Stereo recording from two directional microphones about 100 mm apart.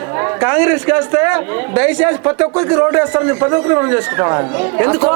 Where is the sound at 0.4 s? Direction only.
20° right (ahead or behind).